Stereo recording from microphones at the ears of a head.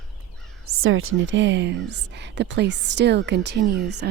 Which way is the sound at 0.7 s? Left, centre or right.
Right.